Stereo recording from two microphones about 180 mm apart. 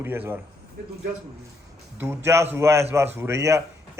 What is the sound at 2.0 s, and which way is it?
A man's voice, 15° right (ahead or behind).